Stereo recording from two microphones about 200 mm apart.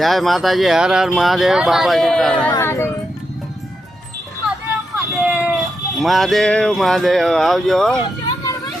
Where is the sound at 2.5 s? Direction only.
10° left (ahead or behind).